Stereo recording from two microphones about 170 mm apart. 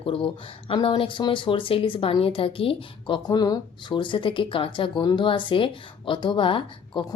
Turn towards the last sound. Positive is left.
turn(degrees=25)  # may be behind; listen again after turning